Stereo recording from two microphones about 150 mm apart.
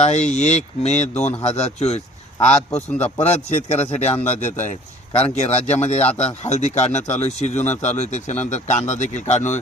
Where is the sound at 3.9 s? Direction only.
45° left (ahead or behind).